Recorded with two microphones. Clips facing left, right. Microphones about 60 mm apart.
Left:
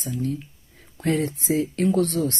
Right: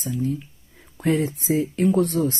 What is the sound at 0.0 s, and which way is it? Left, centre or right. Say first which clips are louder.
Speech: right 2 dB; centre.